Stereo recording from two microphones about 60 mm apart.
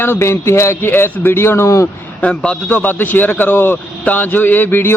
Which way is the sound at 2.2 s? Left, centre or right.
Left.